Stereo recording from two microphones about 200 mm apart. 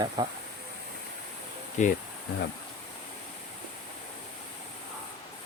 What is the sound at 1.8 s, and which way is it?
Speech, 40° left (ahead or behind).